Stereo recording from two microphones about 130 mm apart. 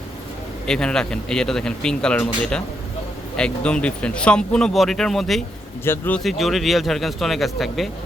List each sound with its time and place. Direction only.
0.7 s speech: 5° left (ahead or behind)
5.8 s speech: 15° left (ahead or behind)
6.1 s speech: centre (ahead or behind)